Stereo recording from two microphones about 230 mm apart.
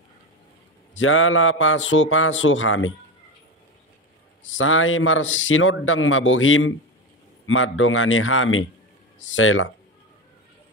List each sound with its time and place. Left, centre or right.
0.9 s a man's voice: left
4.6 s a man's voice: left